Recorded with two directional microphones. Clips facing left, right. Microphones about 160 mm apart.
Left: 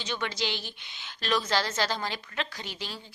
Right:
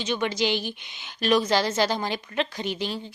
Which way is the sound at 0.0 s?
15° right (ahead or behind).